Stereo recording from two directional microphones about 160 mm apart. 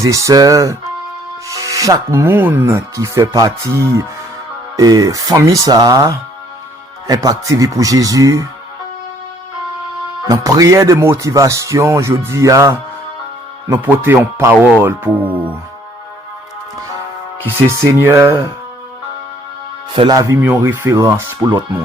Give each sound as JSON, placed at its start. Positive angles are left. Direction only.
{"t": 0.0, "sound": "rub", "side_deg": -20}
{"t": 10.2, "sound": "rub", "side_deg": -20}
{"t": 13.7, "sound": "speech", "side_deg": -15}
{"t": 18.0, "sound": "rub", "side_deg": -15}
{"t": 19.9, "sound": "rub", "side_deg": -30}